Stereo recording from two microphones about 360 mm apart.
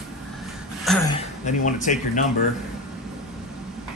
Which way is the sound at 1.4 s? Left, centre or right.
Centre.